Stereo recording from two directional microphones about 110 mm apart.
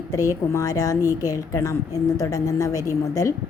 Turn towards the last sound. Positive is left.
turn(degrees=30)  # may be behind; listen again after turning